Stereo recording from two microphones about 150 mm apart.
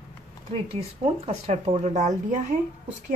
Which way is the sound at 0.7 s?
45° right (ahead or behind).